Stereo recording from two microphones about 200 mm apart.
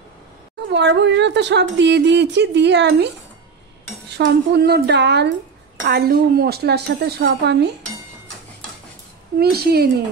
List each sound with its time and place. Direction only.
0.7 s speech: 60° right (ahead or behind)
4.2 s speech: 55° right (ahead or behind)
5.9 s a woman's voice: 50° right (ahead or behind)
9.4 s a woman's voice: 50° right (ahead or behind)